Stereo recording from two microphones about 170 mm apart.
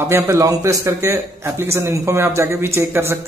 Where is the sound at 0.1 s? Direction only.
20° right (ahead or behind).